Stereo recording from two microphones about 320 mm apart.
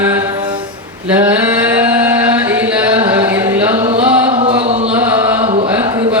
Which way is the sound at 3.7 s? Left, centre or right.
Centre.